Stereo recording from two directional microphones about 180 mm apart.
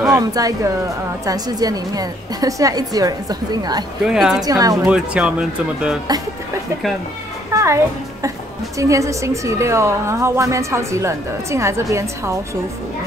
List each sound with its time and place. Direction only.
0.1 s a woman's voice: 20° right (ahead or behind)
4.0 s speech: 5° right (ahead or behind)
4.4 s a woman's voice: 20° right (ahead or behind)
4.8 s speech: 5° right (ahead or behind)
7.5 s a child's voice: 15° right (ahead or behind)